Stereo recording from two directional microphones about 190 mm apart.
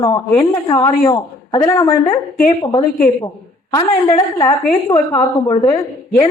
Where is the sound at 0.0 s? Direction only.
25° left (ahead or behind).